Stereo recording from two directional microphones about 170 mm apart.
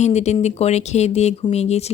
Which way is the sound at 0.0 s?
40° left (ahead or behind).